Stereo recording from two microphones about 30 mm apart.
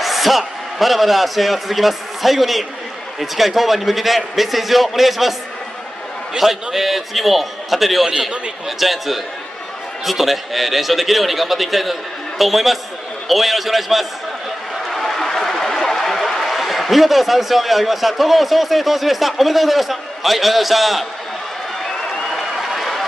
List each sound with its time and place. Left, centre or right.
0.0 s a man's voice: centre
6.3 s a man's voice: centre
14.9 s a sound: centre
16.4 s a man's voice: centre
22.3 s applause: centre